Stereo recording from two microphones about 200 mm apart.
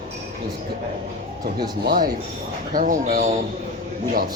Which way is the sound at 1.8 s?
50° right (ahead or behind).